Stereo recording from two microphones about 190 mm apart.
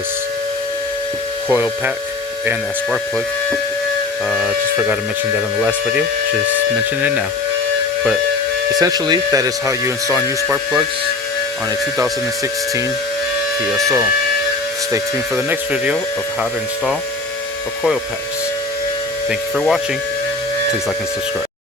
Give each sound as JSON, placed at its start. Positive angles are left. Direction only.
{"t": 1.5, "sound": "speech", "side_deg": -10}
{"t": 4.3, "sound": "speech", "side_deg": 0}
{"t": 8.7, "sound": "speech", "side_deg": -20}
{"t": 13.8, "sound": "speech", "side_deg": -10}
{"t": 15.4, "sound": "speech", "side_deg": -5}
{"t": 19.3, "sound": "speech", "side_deg": 0}